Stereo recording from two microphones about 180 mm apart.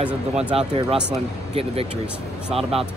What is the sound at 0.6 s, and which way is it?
A man's voice, 30° right (ahead or behind).